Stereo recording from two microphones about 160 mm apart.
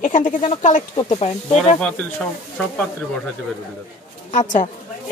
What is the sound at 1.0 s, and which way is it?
Speech, 40° left (ahead or behind).